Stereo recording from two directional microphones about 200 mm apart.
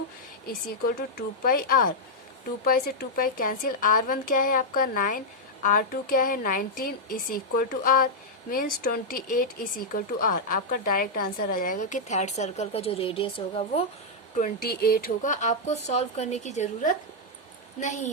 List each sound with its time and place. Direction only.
1.1 s a woman's voice: 45° left (ahead or behind); by 13.8 s 30° left (ahead or behind)
14.3 s speech: 45° left (ahead or behind)